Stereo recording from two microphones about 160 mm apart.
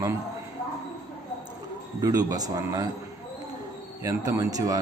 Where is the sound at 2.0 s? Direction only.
20° right (ahead or behind).